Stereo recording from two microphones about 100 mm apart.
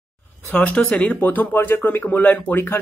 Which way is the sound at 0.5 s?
15° left (ahead or behind).